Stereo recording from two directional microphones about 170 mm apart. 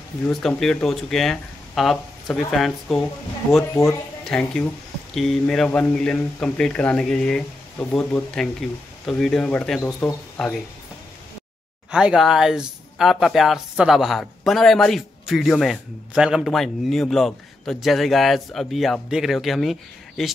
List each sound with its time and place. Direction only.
0.3 s speech: centre (ahead or behind)
9.8 s speech: 15° left (ahead or behind)
11.9 s speech: 5° right (ahead or behind)